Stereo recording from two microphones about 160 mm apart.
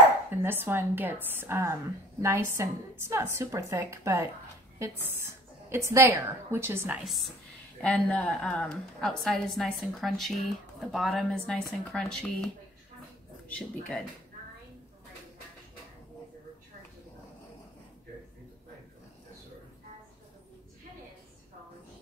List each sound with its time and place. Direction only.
0.4 s a woman's voice: 15° right (ahead or behind)
7.0 s a woman's voice: centre (ahead or behind)
13.5 s a woman's voice: 5° left (ahead or behind)